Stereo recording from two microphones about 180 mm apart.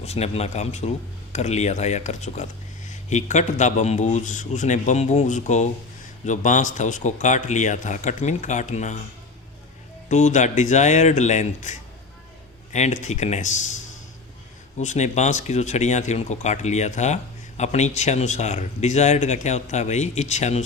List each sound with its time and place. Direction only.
0.0 s speech: 35° left (ahead or behind)
10.1 s speech: 40° left (ahead or behind)
14.8 s speech: 40° left (ahead or behind)